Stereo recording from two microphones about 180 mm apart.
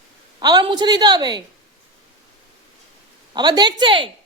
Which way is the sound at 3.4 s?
25° right (ahead or behind).